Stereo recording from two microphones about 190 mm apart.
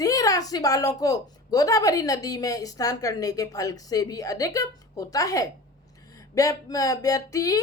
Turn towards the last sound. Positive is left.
turn(degrees=20)  # may be behind; listen again after turning